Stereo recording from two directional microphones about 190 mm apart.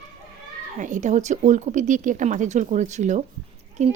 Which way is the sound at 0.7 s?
40° right (ahead or behind).